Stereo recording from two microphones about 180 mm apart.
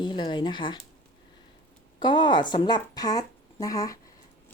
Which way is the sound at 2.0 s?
25° left (ahead or behind).